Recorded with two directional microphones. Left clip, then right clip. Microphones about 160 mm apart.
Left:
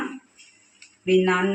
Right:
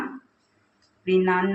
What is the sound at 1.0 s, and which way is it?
Speech, 20° left (ahead or behind).